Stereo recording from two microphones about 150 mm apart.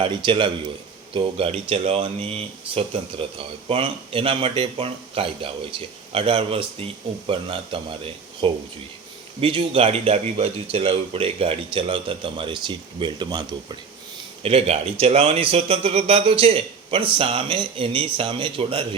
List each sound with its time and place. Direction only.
0.0 s speech: 30° right (ahead or behind)
14.4 s speech: 40° right (ahead or behind)